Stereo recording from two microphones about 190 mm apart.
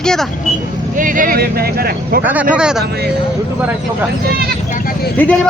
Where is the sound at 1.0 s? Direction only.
45° right (ahead or behind).